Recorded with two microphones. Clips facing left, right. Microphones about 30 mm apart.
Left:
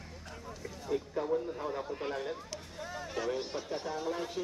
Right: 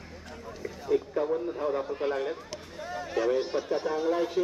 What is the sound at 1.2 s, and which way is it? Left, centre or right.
Speech, centre.